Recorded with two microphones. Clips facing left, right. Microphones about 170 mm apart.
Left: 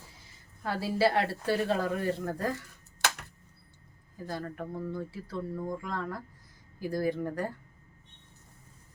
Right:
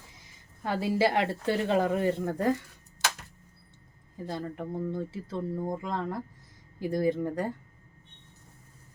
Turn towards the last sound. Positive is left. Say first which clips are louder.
# right 3 dB
turn(degrees=-20)  # may be behind; listen again after turning